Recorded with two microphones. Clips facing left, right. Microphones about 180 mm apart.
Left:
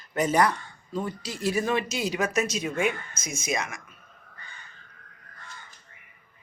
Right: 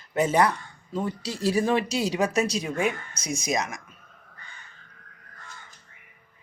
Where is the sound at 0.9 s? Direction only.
25° right (ahead or behind).